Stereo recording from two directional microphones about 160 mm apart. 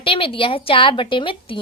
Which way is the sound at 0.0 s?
35° left (ahead or behind).